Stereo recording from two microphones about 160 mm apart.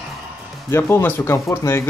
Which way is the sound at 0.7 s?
15° left (ahead or behind).